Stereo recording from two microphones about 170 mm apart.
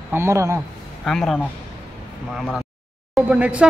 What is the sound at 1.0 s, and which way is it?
A man's voice, centre (ahead or behind).